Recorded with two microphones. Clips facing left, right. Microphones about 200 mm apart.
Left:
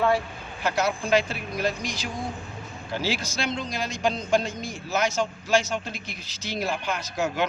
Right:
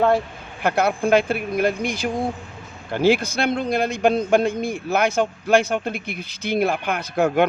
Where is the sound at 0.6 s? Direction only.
55° right (ahead or behind).